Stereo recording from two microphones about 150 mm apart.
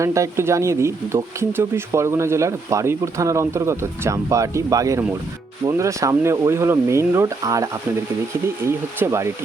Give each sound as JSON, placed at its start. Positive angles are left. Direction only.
{"t": 0.0, "sound": "speech", "side_deg": -20}